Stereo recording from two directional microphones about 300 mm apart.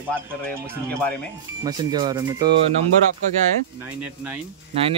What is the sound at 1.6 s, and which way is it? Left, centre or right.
Speech, centre.